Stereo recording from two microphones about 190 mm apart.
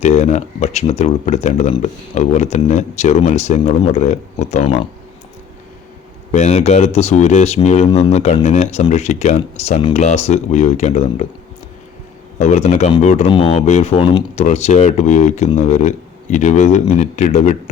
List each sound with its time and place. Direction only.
0.0 s speech: 35° left (ahead or behind)
6.3 s speech: 40° left (ahead or behind)
12.4 s speech: 35° left (ahead or behind)
14.3 s speech: 35° left (ahead or behind)